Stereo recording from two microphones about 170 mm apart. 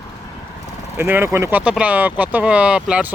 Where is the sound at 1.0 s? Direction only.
15° right (ahead or behind).